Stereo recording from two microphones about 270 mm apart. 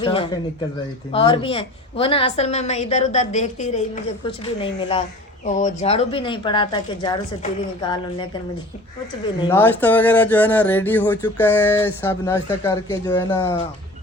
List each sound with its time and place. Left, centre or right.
0.0 s a woman's voice: centre
9.4 s speech: centre